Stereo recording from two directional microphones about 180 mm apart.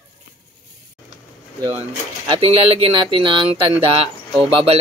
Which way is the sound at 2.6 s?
35° right (ahead or behind).